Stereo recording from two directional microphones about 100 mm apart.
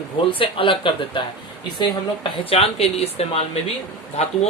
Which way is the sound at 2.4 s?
75° left (ahead or behind).